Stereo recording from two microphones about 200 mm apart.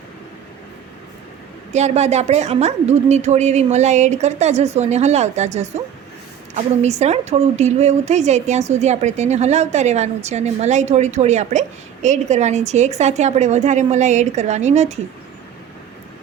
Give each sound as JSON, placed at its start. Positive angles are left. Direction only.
{"t": 1.7, "sound": "a woman's voice", "side_deg": -35}
{"t": 6.8, "sound": "a woman's voice", "side_deg": -35}